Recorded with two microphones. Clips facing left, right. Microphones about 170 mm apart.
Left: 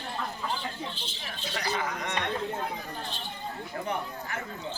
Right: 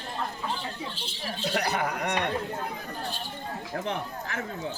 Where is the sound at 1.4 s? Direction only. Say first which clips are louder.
Right 4 dB; 65° right (ahead or behind).